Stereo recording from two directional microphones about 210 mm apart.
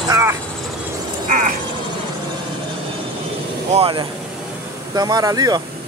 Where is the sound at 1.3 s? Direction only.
40° right (ahead or behind).